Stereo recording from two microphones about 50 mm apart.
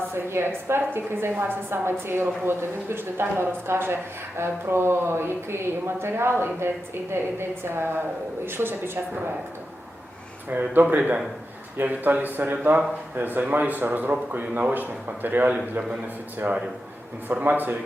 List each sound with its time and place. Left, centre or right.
0.1 s a woman's voice: right
10.5 s speech: right
10.8 s speech: right
17.4 s speech: right